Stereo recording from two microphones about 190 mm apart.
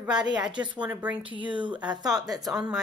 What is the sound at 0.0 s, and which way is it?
Speech, 5° right (ahead or behind).